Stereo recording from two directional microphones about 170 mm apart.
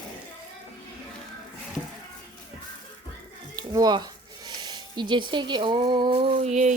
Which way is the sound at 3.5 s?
20° right (ahead or behind).